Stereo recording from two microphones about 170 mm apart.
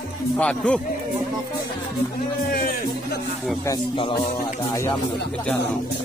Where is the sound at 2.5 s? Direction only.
60° left (ahead or behind).